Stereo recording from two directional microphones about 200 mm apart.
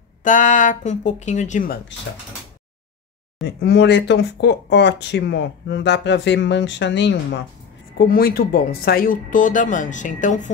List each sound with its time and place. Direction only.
0.2 s speech: 40° left (ahead or behind)
3.4 s speech: 60° left (ahead or behind)
8.1 s speech: 50° left (ahead or behind)